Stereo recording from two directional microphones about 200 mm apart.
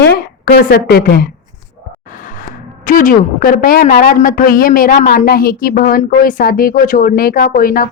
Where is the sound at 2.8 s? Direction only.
40° left (ahead or behind).